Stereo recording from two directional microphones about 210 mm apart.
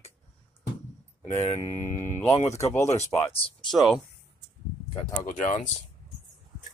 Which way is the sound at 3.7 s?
Centre (ahead or behind).